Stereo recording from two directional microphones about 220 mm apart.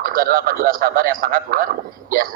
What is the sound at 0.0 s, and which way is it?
Speech, 40° right (ahead or behind).